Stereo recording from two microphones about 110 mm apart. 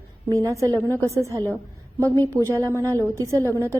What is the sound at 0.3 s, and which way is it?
A woman's voice, 30° right (ahead or behind).